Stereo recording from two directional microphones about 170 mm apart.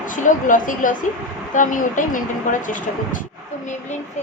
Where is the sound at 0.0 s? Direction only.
50° left (ahead or behind).